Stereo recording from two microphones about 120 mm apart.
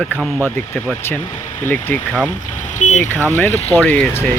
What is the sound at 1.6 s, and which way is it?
Speech, 15° left (ahead or behind).